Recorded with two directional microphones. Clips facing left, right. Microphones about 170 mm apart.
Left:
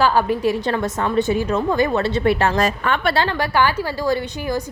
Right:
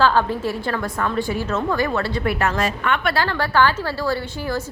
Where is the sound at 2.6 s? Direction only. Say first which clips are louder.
Left 2 dB; 35° left (ahead or behind).